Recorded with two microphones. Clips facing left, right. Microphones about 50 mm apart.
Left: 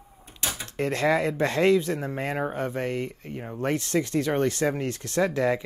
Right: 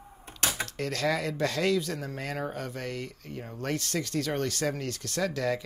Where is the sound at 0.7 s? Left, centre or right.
Left.